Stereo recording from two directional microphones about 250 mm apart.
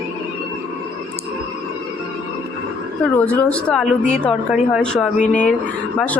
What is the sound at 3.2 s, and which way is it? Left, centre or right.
A woman's voice, centre.